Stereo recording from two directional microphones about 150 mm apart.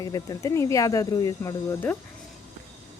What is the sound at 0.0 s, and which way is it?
Speech, 25° left (ahead or behind).